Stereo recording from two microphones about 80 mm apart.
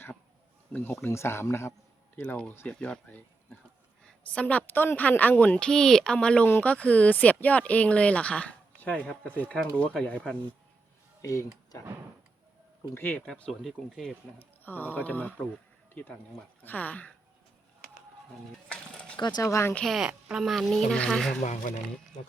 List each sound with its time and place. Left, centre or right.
0.7 s speech: left
2.2 s speech: centre
11.2 s speech: left
12.9 s speech: left
13.2 s speech: centre
13.5 s speech: centre
14.6 s speech: left
16.6 s speech: centre
18.7 s pulleys: centre
19.4 s speech: left
19.8 s speech: centre
20.1 s speech: centre
20.4 s speech: centre